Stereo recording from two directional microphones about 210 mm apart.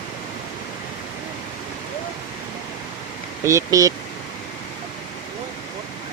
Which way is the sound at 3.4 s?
15° right (ahead or behind).